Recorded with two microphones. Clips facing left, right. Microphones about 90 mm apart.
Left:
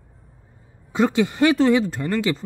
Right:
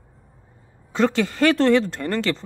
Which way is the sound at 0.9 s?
15° left (ahead or behind).